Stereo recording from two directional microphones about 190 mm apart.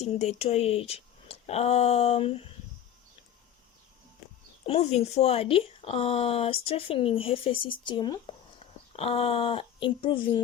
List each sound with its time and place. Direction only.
0.0 s speech: 35° left (ahead or behind)
4.6 s speech: 35° left (ahead or behind)